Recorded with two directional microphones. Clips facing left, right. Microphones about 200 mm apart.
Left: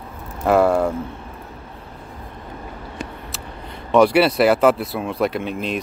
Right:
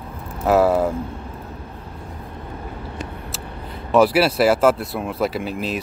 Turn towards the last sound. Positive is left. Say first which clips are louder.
# left 1 dB
turn(degrees=-5)  # may be behind; listen again after turning